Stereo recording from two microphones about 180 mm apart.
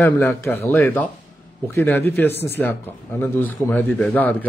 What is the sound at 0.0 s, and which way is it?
Speech, 10° left (ahead or behind).